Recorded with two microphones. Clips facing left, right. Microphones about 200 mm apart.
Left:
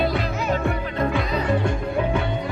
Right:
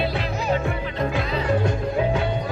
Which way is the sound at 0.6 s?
60° left (ahead or behind).